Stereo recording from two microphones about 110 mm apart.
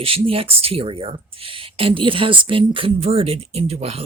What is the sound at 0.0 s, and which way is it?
Speech, 55° right (ahead or behind).